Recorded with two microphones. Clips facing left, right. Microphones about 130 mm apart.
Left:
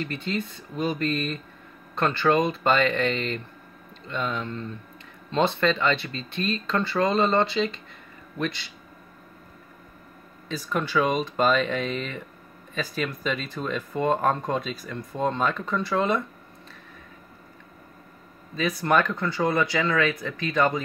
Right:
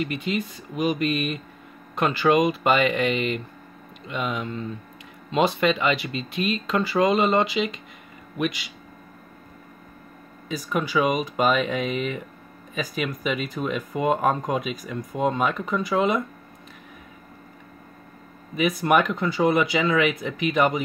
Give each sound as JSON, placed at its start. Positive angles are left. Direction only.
{"t": 0.0, "sound": "speech", "side_deg": -10}
{"t": 10.5, "sound": "speech", "side_deg": -10}
{"t": 18.5, "sound": "speech", "side_deg": -20}